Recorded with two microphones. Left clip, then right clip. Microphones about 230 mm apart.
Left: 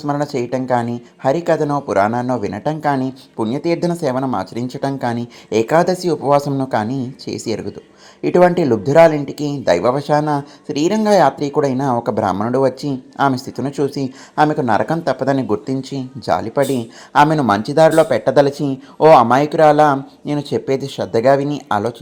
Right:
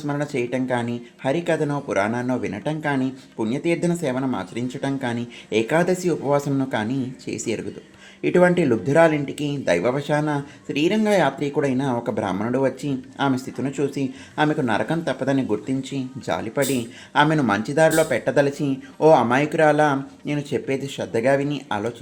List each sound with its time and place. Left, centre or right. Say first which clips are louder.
0.0 s speech: left 5 dB; left